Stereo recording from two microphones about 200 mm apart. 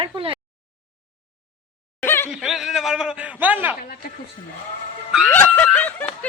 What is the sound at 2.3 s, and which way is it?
A man's voice, centre (ahead or behind).